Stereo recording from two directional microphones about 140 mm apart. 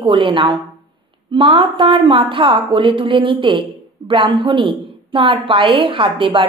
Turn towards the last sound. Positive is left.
turn(degrees=-35)  # may be behind; listen again after turning